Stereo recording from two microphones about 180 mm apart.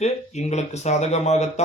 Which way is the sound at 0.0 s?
40° left (ahead or behind).